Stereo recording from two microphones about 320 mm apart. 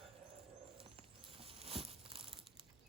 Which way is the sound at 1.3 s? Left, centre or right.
Centre.